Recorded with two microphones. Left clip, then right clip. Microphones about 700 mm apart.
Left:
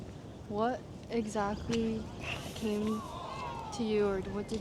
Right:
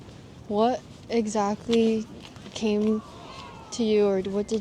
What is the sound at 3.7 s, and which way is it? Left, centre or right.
Speech, right.